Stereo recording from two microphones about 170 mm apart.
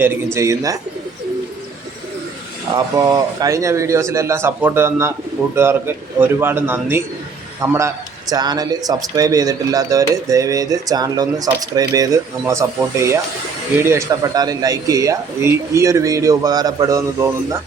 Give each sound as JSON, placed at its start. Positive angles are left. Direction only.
{"t": 0.3, "sound": "speech", "side_deg": -20}
{"t": 2.7, "sound": "a man's voice", "side_deg": -20}